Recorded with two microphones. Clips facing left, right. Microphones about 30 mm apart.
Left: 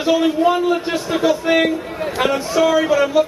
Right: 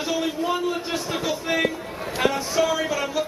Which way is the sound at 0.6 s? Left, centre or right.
Left.